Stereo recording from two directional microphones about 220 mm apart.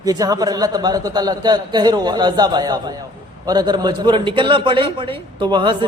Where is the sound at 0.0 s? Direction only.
15° right (ahead or behind).